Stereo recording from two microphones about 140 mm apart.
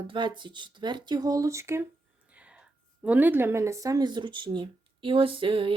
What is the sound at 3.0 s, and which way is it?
Speech, 10° right (ahead or behind).